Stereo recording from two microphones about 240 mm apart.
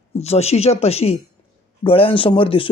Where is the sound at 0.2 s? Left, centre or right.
Left.